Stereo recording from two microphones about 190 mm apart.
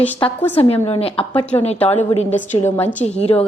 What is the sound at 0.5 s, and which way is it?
Speech, 30° left (ahead or behind).